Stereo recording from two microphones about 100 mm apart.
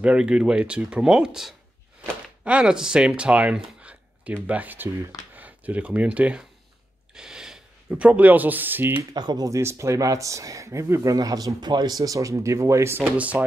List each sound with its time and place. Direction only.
0.0 s speech: 10° right (ahead or behind)
9.1 s speech: 45° right (ahead or behind)
9.5 s speech: 30° right (ahead or behind)